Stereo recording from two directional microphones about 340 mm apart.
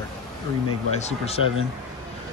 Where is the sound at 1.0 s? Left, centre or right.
Centre.